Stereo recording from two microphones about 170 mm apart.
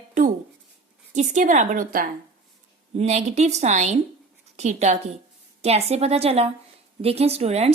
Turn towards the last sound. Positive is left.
turn(degrees=-40)  # may be behind; listen again after turning